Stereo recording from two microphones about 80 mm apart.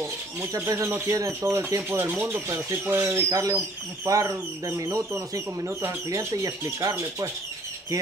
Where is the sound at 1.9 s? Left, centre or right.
Right.